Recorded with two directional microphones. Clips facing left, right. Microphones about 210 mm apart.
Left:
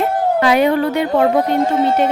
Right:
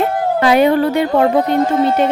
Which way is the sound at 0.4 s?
30° right (ahead or behind).